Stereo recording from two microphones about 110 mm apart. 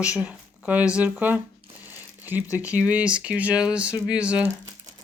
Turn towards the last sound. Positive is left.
turn(degrees=-10)  # may be behind; listen again after turning